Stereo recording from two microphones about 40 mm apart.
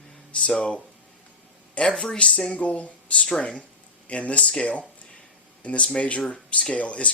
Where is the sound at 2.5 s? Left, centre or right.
Left.